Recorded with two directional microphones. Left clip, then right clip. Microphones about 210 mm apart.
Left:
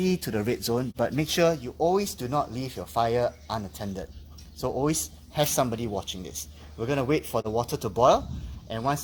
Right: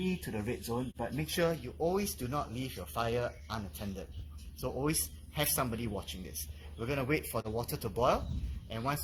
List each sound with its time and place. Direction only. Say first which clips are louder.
0.0 s speech: left 10 dB; 50° left (ahead or behind)